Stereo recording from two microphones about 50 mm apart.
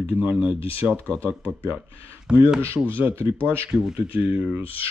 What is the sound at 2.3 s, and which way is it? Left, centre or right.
Speech, centre.